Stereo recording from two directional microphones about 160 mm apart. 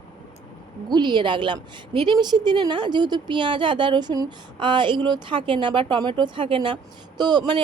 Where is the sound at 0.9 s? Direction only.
25° right (ahead or behind).